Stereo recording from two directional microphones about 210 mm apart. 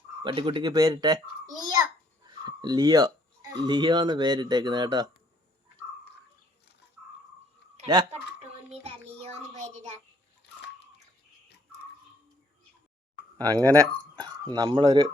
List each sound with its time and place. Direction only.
0.2 s a child's voice: 20° right (ahead or behind)
8.4 s child singing: 30° right (ahead or behind)
13.4 s a child's voice: 15° right (ahead or behind)